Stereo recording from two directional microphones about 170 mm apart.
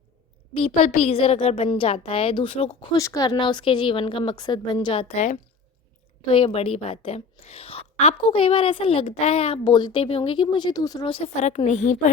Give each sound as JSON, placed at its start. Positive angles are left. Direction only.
{"t": 0.5, "sound": "a woman's voice", "side_deg": 40}
{"t": 2.9, "sound": "a woman's voice", "side_deg": 20}
{"t": 11.4, "sound": "a woman's voice", "side_deg": 40}